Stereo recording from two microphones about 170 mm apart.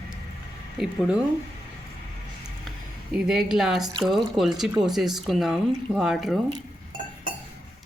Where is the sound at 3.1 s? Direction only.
5° right (ahead or behind).